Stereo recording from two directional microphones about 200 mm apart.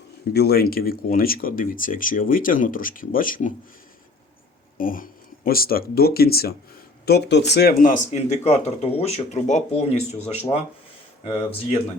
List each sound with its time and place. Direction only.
0.3 s speech: 50° left (ahead or behind)
4.8 s speech: 45° left (ahead or behind)